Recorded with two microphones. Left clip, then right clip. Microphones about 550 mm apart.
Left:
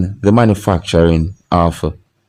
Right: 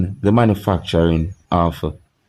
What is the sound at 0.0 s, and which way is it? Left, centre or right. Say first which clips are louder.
Speech: left 4 dB; right.